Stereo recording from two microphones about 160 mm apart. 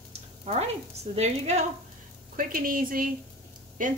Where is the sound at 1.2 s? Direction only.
45° right (ahead or behind).